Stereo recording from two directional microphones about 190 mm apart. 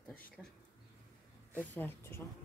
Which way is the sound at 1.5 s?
10° left (ahead or behind).